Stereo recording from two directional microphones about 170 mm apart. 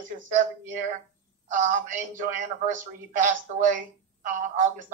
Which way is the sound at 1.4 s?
50° right (ahead or behind).